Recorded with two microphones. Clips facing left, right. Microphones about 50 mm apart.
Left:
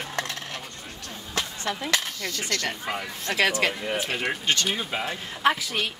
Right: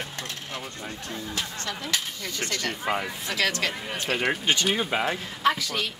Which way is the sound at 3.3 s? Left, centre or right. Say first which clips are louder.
Left 4 dB; left.